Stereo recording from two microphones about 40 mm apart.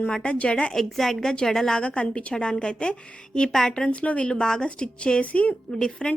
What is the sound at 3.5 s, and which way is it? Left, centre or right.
Speech, centre.